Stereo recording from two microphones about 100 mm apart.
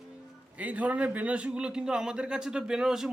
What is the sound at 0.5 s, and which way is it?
A man's voice, 15° right (ahead or behind).